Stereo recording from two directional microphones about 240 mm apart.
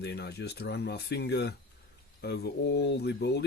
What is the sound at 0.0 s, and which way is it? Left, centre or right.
Speech, left.